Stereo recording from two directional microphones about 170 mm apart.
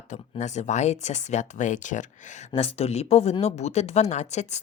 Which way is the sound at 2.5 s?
35° left (ahead or behind).